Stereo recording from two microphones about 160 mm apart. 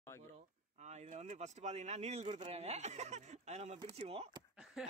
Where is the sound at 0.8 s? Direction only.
45° right (ahead or behind).